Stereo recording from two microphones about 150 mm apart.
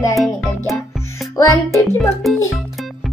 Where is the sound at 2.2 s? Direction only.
Centre (ahead or behind).